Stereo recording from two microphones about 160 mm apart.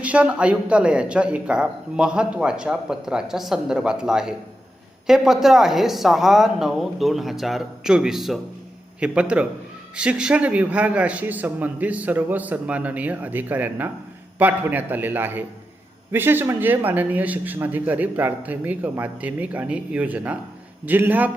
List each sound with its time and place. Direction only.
0.0 s a man's voice: 10° right (ahead or behind)